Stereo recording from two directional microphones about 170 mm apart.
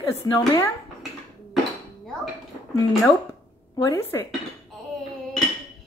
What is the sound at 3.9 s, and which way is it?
Speech, 15° left (ahead or behind).